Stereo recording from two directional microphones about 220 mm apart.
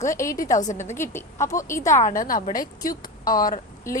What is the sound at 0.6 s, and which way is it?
Speech, 35° left (ahead or behind).